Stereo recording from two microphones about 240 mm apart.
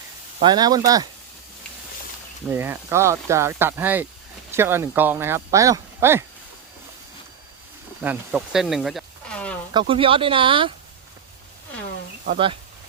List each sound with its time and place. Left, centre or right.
0.3 s speech: centre
2.5 s speech: centre
8.0 s speech: centre
9.7 s speech: right